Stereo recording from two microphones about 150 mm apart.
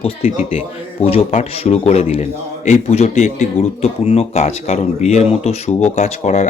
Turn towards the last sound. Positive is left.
turn(degrees=50)  # may be behind; listen again after turning